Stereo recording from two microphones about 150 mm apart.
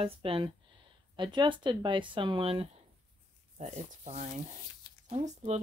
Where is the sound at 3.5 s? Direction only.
50° right (ahead or behind).